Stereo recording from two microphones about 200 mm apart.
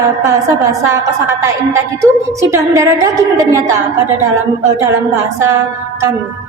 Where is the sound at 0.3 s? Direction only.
15° right (ahead or behind).